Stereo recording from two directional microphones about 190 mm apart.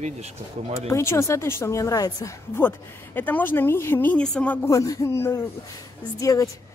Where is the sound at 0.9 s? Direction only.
15° left (ahead or behind).